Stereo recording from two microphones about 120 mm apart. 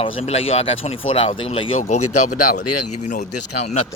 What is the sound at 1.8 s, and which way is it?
Speech, 85° left.